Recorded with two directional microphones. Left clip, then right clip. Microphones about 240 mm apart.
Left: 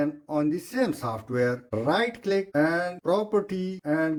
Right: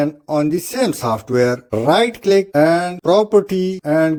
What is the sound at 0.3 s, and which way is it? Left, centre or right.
Speech, right.